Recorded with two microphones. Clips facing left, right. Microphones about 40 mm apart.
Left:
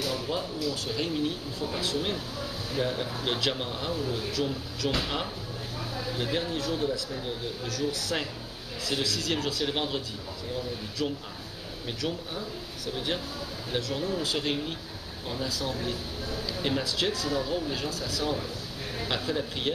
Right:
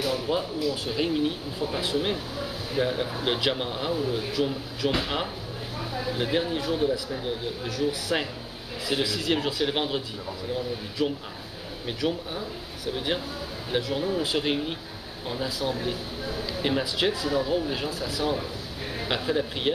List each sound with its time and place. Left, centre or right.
0.0 s speech: centre